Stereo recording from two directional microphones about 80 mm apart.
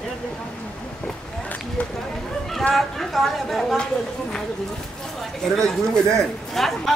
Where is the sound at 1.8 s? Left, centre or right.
Centre.